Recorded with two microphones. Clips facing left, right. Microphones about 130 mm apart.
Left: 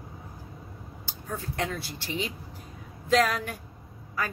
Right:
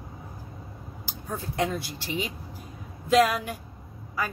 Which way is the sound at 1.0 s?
15° right (ahead or behind).